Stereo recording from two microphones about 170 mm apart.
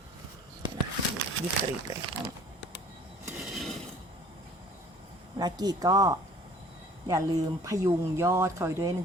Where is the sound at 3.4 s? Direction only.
Centre (ahead or behind).